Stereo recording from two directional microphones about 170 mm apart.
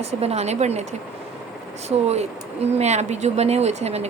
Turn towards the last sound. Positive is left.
turn(degrees=-40)  # may be behind; listen again after turning